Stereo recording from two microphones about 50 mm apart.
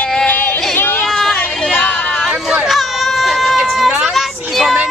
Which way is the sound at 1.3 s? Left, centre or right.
Left.